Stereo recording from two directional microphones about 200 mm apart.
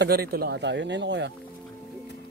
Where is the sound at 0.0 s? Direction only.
50° right (ahead or behind).